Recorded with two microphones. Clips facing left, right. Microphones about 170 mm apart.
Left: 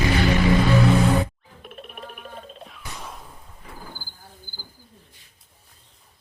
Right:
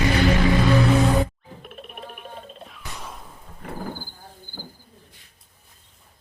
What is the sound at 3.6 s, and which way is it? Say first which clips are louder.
Wild animals: right 10 dB; 65° right (ahead or behind).